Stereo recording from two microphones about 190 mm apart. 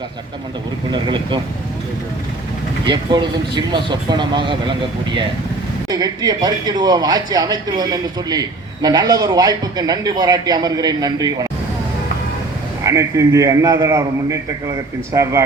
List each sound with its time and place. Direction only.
0.9 s speech: 25° right (ahead or behind)
2.8 s speech: 25° right (ahead or behind)
5.9 s speech: 20° right (ahead or behind)
12.8 s a man's voice: 15° right (ahead or behind)